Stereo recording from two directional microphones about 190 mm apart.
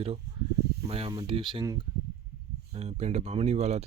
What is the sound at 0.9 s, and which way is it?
Speech, 30° right (ahead or behind).